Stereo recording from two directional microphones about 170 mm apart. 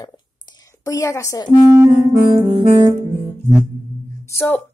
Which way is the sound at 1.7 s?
15° right (ahead or behind).